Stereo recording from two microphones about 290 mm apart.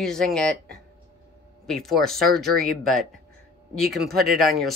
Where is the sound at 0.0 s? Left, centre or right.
Centre.